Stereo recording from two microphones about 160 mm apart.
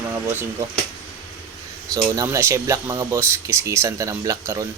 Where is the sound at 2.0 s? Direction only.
20° right (ahead or behind).